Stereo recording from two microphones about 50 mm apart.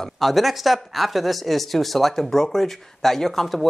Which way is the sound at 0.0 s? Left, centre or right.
Centre.